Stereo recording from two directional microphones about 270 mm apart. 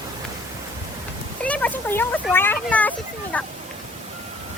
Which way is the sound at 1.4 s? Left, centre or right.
Centre.